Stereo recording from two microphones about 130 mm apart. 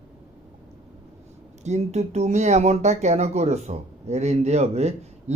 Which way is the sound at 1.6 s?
60° right (ahead or behind).